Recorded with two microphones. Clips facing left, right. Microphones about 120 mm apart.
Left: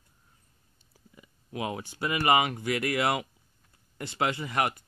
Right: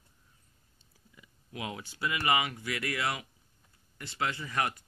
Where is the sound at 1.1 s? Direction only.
40° left (ahead or behind).